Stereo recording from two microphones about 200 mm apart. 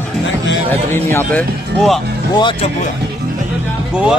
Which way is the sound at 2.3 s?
25° left (ahead or behind).